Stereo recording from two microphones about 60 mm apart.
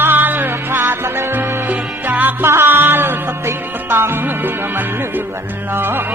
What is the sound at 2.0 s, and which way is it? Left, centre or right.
Music, right.